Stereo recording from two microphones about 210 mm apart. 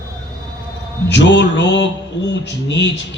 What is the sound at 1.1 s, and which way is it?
A man's voice, 60° left (ahead or behind).